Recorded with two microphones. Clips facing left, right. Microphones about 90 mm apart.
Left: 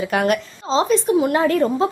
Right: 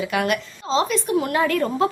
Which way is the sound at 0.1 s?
35° left (ahead or behind).